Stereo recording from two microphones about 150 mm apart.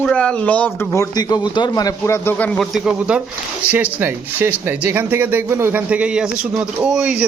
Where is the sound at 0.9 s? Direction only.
25° left (ahead or behind).